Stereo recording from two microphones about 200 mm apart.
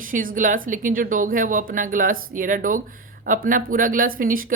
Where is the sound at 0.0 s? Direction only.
45° right (ahead or behind).